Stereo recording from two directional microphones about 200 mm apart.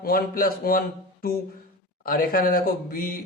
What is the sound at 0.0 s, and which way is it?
A man's voice, 45° left (ahead or behind).